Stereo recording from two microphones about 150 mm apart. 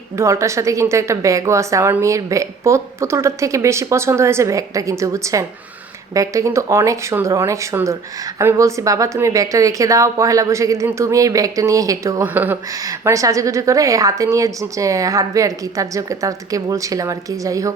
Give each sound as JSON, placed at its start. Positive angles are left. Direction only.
{"t": 0.2, "sound": "a woman's voice", "side_deg": -20}
{"t": 12.7, "sound": "a woman's voice", "side_deg": -20}